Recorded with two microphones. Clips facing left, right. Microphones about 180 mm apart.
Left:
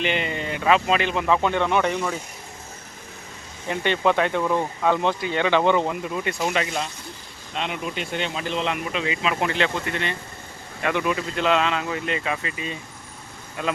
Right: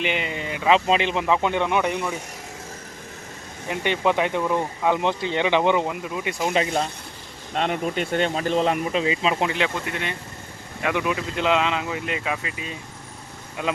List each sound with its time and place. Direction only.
0.0 s speech: 10° right (ahead or behind)
0.7 s speech: 20° right (ahead or behind)
3.7 s speech: 15° right (ahead or behind)
5.8 s speech: 5° right (ahead or behind)
6.5 s speech: 30° right (ahead or behind)
7.5 s speech: 45° right (ahead or behind); by 9.5 s 30° right (ahead or behind)
9.5 s speech: 10° right (ahead or behind)